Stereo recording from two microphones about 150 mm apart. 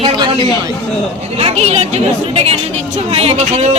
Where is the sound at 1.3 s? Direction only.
45° right (ahead or behind).